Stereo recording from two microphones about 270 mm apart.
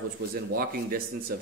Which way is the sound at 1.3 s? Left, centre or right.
Right.